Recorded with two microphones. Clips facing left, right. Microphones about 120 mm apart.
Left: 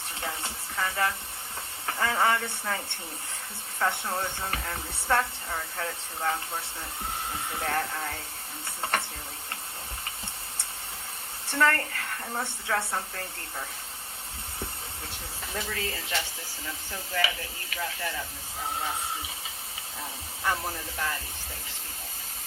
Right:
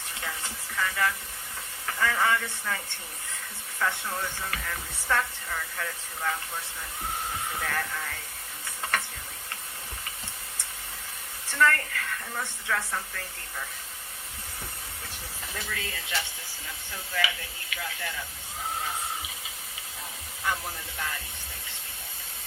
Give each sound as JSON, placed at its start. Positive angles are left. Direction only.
{"t": 0.2, "sound": "speech", "side_deg": 30}
{"t": 7.6, "sound": "speech", "side_deg": 30}
{"t": 8.8, "sound": "stir", "side_deg": 30}
{"t": 11.4, "sound": "speech", "side_deg": 35}
{"t": 15.5, "sound": "speech", "side_deg": 35}